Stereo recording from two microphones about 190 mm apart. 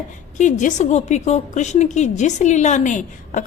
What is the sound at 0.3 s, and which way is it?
A woman's voice, 40° left (ahead or behind).